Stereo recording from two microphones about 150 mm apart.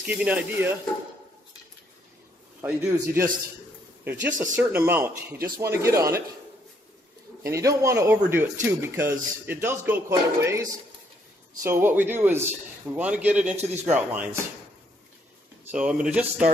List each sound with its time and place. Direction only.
0.0 s speech: 10° right (ahead or behind)
2.6 s speech: 15° right (ahead or behind)
7.4 s speech: 20° right (ahead or behind)
15.7 s speech: 5° right (ahead or behind)